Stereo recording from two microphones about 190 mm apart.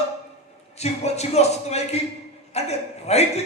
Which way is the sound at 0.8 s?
35° left (ahead or behind).